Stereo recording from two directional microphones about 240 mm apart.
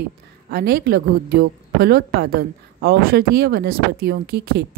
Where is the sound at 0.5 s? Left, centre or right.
Right.